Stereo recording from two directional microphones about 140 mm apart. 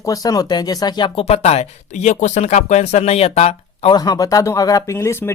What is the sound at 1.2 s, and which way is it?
Speech, 50° left (ahead or behind).